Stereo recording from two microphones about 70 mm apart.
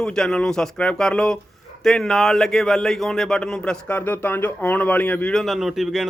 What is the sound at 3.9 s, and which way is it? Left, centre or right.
Speech, left.